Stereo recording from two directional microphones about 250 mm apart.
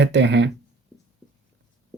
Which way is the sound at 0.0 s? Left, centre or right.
Right.